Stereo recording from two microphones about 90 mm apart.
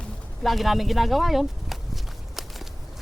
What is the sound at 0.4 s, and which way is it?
Speech, centre (ahead or behind).